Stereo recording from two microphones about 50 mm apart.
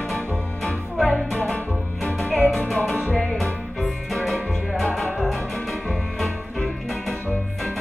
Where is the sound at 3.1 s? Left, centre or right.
Centre.